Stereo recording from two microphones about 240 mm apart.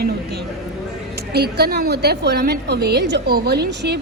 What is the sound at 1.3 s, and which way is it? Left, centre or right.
A woman's voice, right.